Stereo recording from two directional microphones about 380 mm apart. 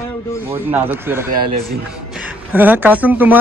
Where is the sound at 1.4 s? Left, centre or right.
Right.